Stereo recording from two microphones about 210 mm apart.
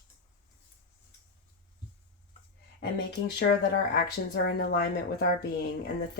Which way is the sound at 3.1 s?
50° left (ahead or behind).